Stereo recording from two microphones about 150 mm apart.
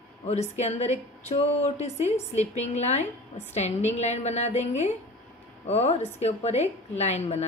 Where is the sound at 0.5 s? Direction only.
50° left (ahead or behind).